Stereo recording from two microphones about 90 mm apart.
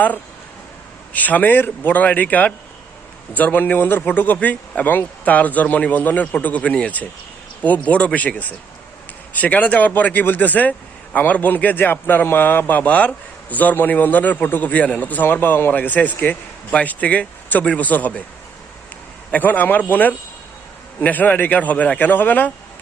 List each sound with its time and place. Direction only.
1.1 s a man's voice: 20° left (ahead or behind)
19.3 s a man's voice: 20° left (ahead or behind)